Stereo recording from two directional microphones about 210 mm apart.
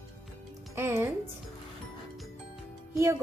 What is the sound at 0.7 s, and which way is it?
Speech, 10° right (ahead or behind).